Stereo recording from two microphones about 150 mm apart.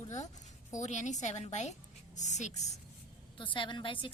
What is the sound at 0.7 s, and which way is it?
A woman's voice, 50° left (ahead or behind).